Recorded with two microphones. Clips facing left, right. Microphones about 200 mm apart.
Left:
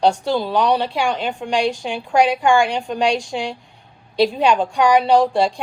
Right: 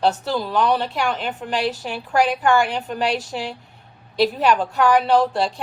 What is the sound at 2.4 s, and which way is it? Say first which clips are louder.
Speech: left 2 dB; 25° left (ahead or behind).